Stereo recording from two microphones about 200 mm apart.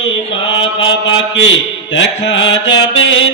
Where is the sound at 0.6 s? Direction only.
70° left (ahead or behind).